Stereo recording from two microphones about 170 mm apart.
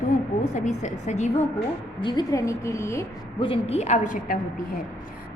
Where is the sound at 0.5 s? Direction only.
45° left (ahead or behind).